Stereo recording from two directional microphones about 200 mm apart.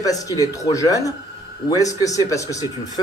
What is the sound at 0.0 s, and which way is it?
Speech, 15° left (ahead or behind).